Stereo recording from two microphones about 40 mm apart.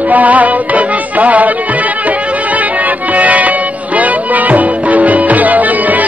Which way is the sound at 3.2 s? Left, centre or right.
Right.